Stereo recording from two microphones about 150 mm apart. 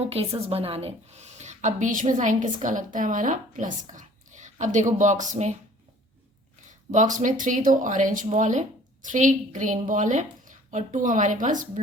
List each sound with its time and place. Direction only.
0.0 s a woman's voice: 40° right (ahead or behind)
6.7 s a woman's voice: 55° right (ahead or behind)